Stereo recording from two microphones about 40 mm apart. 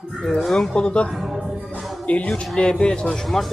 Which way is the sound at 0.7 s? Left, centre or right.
Left.